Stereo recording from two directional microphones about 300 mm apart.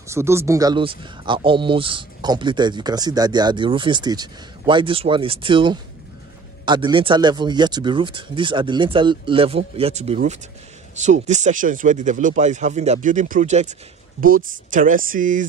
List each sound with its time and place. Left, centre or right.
0.0 s speech: centre; by 15.4 s right